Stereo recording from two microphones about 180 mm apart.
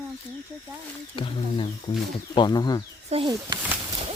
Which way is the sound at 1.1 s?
30° left (ahead or behind).